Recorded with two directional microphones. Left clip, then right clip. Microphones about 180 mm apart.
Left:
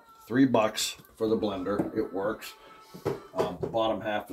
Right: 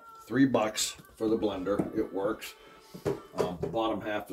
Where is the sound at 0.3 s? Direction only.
45° left (ahead or behind).